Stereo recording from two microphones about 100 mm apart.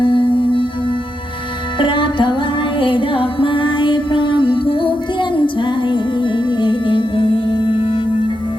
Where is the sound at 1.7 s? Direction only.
55° left (ahead or behind).